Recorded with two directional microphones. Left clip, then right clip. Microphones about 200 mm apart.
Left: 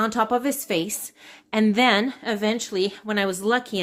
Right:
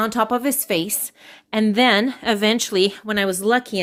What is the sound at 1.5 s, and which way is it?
Speech, 15° right (ahead or behind).